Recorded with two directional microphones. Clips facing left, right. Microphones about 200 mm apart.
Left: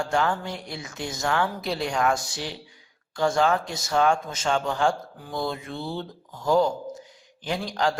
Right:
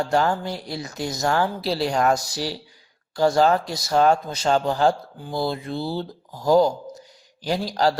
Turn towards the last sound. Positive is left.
turn(degrees=-35)  # may be behind; listen again after turning